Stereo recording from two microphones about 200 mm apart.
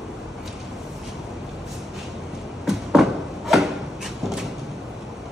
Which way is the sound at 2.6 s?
Centre (ahead or behind).